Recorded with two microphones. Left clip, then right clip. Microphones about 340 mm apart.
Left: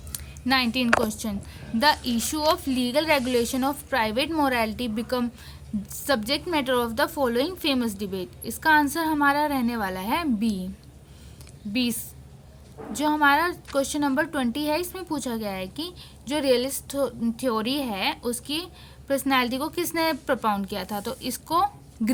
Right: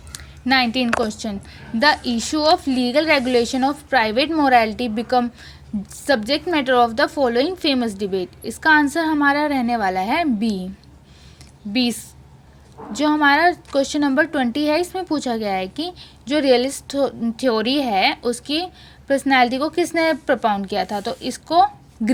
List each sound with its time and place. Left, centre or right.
0.1 s a woman's voice: left
11.7 s a woman's voice: left